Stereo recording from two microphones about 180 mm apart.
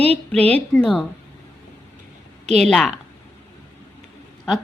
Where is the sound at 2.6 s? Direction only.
5° left (ahead or behind).